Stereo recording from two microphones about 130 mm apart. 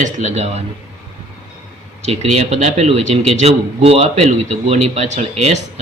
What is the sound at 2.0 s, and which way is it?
A man's voice, 55° right (ahead or behind).